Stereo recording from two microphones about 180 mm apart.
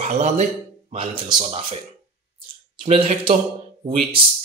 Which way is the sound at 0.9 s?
30° right (ahead or behind).